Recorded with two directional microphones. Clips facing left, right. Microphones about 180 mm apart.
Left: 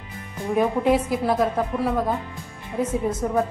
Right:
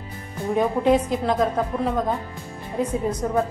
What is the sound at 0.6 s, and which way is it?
A woman's voice, 5° left (ahead or behind).